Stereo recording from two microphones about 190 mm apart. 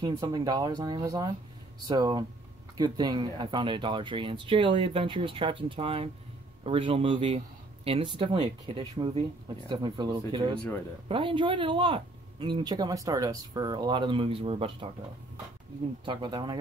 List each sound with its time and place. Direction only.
0.0 s speech: 20° right (ahead or behind)
16.1 s speech: 25° right (ahead or behind)